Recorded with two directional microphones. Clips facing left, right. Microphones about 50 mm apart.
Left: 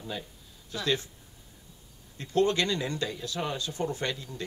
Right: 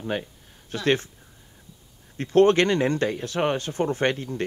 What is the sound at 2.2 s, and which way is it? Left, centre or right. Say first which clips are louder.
Speech: right 8 dB; right.